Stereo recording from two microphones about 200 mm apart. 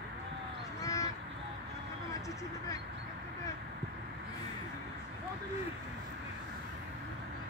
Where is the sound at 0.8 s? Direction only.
15° left (ahead or behind).